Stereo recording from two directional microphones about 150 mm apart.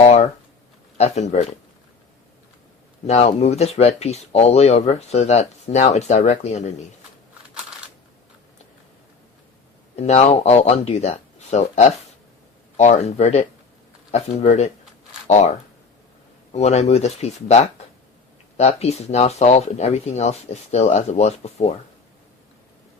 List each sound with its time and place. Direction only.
0.0 s a sound: 45° left (ahead or behind)
0.9 s speech: 50° left (ahead or behind)
3.1 s speech: 45° left (ahead or behind)
9.9 s speech: 45° left (ahead or behind)
16.5 s speech: 45° left (ahead or behind)